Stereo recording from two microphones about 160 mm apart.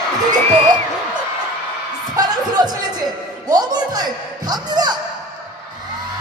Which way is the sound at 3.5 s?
25° right (ahead or behind).